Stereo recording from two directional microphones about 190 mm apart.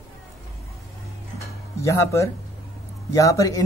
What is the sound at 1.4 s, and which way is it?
Music, 15° left (ahead or behind).